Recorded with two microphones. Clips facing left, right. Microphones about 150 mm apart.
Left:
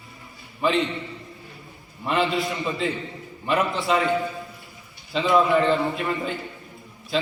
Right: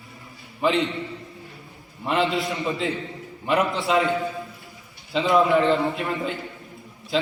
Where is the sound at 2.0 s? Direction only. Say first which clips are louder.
Even; 20° right (ahead or behind).